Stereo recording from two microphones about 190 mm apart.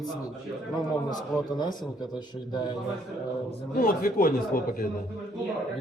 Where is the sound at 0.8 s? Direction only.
20° left (ahead or behind).